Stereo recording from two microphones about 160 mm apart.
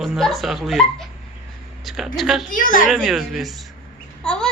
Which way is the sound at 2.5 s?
60° left (ahead or behind).